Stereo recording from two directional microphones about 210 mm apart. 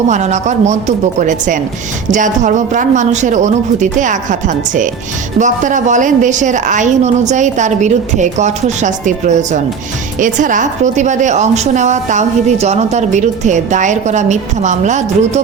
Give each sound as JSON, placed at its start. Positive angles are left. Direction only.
{"t": 0.1, "sound": "a woman's voice", "side_deg": -35}